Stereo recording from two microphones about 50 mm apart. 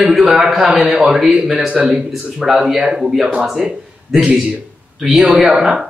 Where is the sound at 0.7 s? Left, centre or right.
Centre.